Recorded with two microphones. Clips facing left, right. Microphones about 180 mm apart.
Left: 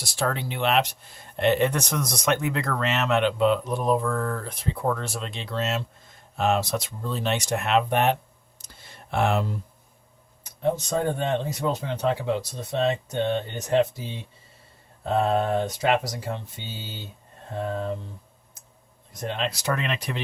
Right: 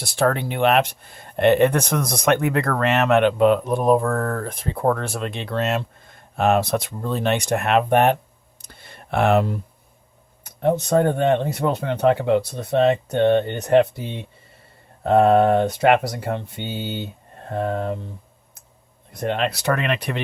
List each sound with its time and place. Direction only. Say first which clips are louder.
0.0 s speech: right 7 dB; 55° right (ahead or behind)
8.6 s clicking: right 4 dB; 60° right (ahead or behind)
10.4 s speech: right 5 dB; 60° right (ahead or behind)
19.1 s speech: right 6 dB; 60° right (ahead or behind)